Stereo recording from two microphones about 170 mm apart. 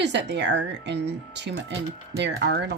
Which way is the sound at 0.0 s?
90° right.